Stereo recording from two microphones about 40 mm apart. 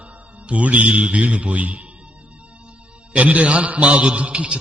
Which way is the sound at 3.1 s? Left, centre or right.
Right.